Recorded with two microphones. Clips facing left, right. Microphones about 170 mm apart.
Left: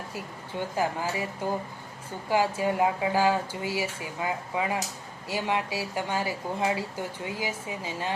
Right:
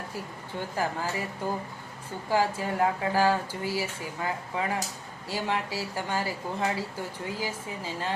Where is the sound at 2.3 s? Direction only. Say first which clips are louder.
Left 2 dB; 15° left (ahead or behind).